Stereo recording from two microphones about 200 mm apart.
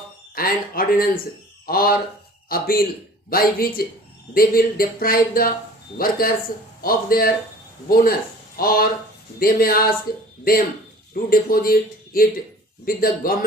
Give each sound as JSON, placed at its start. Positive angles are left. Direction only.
{"t": 0.3, "sound": "speech", "side_deg": 45}
{"t": 11.1, "sound": "speech", "side_deg": 45}